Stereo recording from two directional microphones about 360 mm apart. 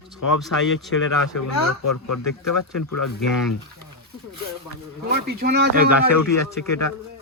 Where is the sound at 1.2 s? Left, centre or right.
Left.